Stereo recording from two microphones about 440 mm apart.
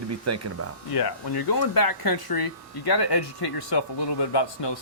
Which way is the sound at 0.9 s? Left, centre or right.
Left.